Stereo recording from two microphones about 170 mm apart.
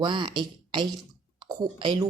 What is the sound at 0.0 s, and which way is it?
A woman's voice, 30° right (ahead or behind).